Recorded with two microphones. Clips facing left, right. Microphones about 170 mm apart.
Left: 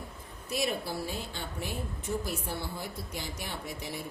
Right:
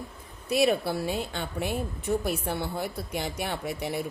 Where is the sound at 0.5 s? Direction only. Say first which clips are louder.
Right 8 dB; 70° right (ahead or behind).